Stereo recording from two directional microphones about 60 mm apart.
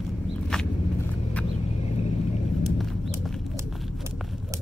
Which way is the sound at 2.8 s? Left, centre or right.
Centre.